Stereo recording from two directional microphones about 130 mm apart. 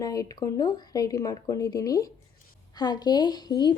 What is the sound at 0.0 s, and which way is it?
A woman's voice, 30° left (ahead or behind).